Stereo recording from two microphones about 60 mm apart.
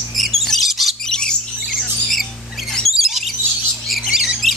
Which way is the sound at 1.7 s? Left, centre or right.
Centre.